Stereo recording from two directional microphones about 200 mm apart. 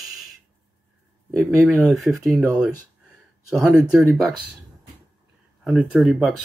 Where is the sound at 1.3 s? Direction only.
Centre (ahead or behind).